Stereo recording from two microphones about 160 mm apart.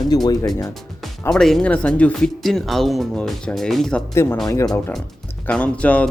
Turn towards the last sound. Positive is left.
turn(degrees=10)  # may be behind; listen again after turning